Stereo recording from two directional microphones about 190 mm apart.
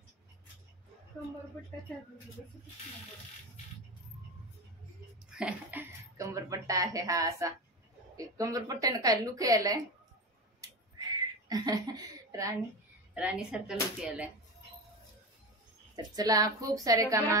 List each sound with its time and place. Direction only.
5.3 s speech: 5° right (ahead or behind)
11.4 s a woman's voice: 20° right (ahead or behind)
13.1 s speech: 5° right (ahead or behind)
16.0 s speech: 20° right (ahead or behind)